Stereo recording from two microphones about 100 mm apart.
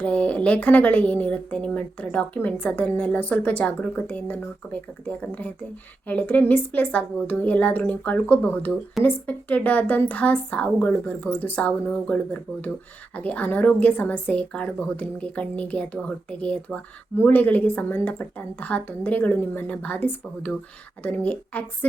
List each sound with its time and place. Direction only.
0.0 s speech: 15° left (ahead or behind)